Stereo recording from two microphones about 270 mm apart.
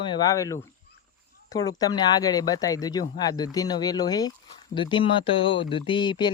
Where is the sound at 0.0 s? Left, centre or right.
Centre.